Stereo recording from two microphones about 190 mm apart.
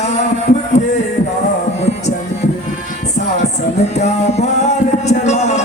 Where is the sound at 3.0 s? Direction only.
35° left (ahead or behind).